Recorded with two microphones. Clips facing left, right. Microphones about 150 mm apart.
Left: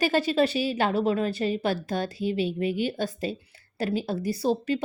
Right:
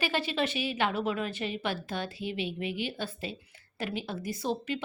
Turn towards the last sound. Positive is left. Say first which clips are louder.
# left 7 dB
turn(degrees=35)  # may be behind; listen again after turning